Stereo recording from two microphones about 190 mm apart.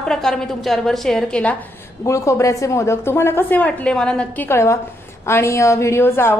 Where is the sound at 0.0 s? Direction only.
5° left (ahead or behind).